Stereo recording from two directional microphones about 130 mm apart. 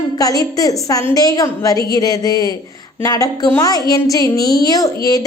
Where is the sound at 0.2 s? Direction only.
30° left (ahead or behind).